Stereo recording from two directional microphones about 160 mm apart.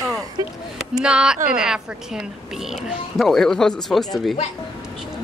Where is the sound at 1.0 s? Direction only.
5° right (ahead or behind).